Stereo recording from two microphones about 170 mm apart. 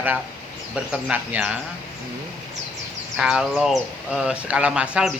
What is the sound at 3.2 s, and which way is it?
A man's voice, 5° right (ahead or behind).